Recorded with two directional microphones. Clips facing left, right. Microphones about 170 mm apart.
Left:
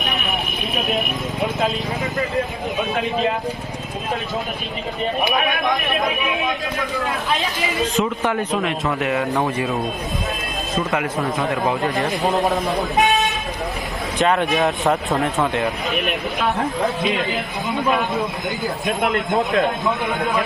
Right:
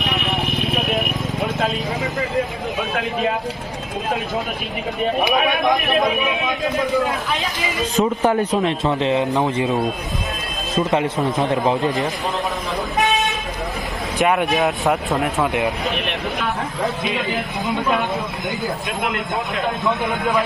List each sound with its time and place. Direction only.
2.9 s a man's voice: centre (ahead or behind)
7.9 s a man's voice: 35° right (ahead or behind)
10.9 s a man's voice: 25° right (ahead or behind)
14.4 s a man's voice: centre (ahead or behind)